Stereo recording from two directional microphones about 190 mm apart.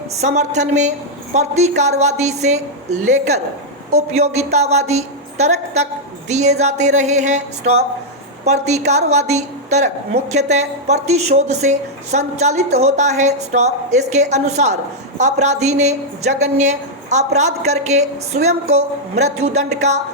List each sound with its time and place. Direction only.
0.2 s a woman's voice: 35° right (ahead or behind)